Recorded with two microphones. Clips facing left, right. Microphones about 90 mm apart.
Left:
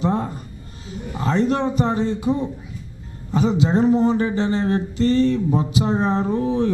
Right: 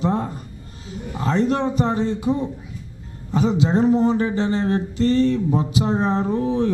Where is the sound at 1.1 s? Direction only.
15° left (ahead or behind).